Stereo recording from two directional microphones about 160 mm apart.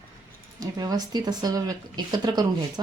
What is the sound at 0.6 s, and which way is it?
Speech, 25° right (ahead or behind).